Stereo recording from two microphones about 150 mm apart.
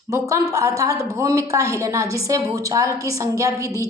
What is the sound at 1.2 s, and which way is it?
A woman's voice, 20° right (ahead or behind).